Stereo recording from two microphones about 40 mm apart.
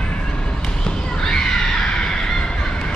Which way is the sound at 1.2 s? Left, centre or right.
Centre.